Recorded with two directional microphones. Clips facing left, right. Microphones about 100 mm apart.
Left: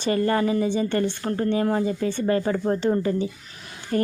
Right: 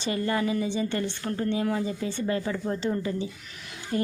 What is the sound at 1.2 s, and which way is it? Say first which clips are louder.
A woman's voice: left 4 dB; 35° left (ahead or behind).